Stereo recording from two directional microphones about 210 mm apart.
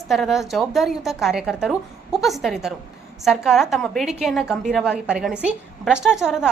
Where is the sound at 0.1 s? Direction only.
Centre (ahead or behind).